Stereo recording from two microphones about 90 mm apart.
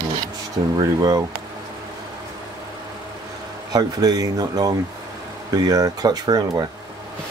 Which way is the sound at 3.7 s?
45° right (ahead or behind).